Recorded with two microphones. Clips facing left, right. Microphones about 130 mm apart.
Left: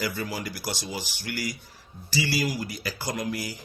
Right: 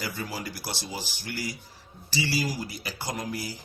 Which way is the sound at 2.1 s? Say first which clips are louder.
Left 2 dB; 35° right (ahead or behind).